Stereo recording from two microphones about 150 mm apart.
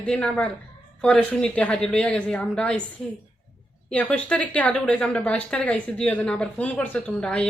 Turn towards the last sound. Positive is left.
turn(degrees=5)  # may be behind; listen again after turning